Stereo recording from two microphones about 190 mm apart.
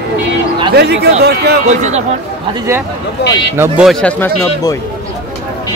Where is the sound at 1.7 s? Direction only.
35° right (ahead or behind).